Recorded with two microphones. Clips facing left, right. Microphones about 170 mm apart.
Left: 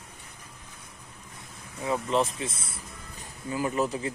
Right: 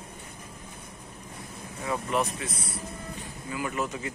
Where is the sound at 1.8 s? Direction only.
25° left (ahead or behind).